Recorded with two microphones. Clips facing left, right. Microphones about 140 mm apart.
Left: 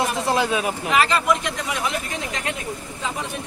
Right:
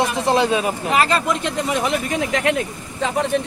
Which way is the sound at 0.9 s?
40° right (ahead or behind).